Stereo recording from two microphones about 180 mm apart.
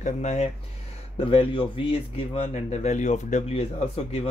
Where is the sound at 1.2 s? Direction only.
30° left (ahead or behind).